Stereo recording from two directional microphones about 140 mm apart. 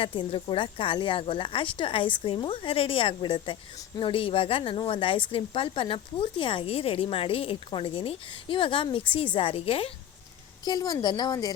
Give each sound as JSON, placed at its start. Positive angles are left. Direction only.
{"t": 0.0, "sound": "a woman's voice", "side_deg": 40}
{"t": 10.7, "sound": "a woman's voice", "side_deg": 30}